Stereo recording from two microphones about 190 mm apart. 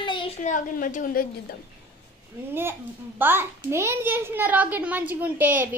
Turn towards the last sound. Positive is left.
turn(degrees=-10)  # may be behind; listen again after turning